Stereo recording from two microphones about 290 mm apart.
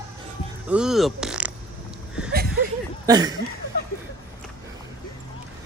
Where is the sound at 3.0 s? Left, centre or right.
Centre.